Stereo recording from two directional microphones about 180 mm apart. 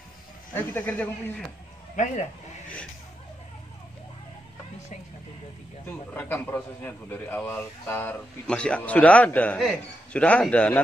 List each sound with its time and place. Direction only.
0.6 s a man's voice: 10° left (ahead or behind)
2.0 s speech: 40° left (ahead or behind)
5.9 s a man's voice: 10° left (ahead or behind)